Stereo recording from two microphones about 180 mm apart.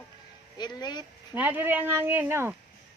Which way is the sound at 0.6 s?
25° left (ahead or behind).